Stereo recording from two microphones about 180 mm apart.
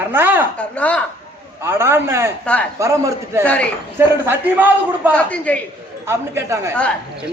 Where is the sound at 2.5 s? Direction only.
5° left (ahead or behind).